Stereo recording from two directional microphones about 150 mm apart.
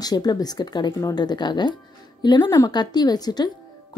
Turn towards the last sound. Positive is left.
turn(degrees=25)  # may be behind; listen again after turning